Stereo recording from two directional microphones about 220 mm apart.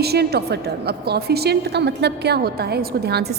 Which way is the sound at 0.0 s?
45° right (ahead or behind).